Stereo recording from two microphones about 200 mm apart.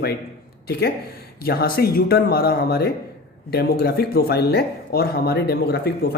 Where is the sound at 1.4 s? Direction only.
50° left (ahead or behind).